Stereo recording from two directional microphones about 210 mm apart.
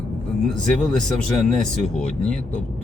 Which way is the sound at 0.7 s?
5° left (ahead or behind).